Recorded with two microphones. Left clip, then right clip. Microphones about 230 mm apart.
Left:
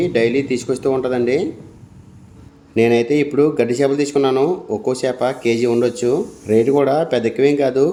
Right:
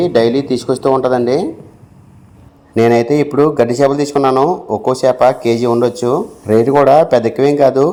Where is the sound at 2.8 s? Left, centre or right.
Centre.